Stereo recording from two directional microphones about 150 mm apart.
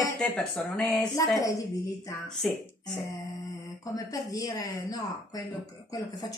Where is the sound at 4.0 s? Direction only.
25° left (ahead or behind).